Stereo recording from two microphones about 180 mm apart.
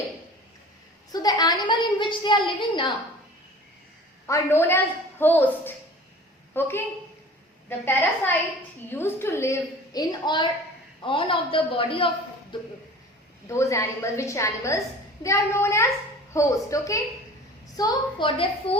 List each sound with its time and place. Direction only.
1.1 s a woman's voice: 20° left (ahead or behind)
4.3 s a woman's voice: 15° left (ahead or behind)
7.9 s a woman's voice: 10° left (ahead or behind); by 12.5 s 30° left (ahead or behind)
13.5 s a woman's voice: 15° left (ahead or behind)